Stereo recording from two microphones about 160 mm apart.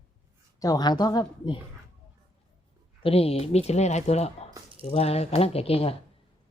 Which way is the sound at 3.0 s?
40° left (ahead or behind).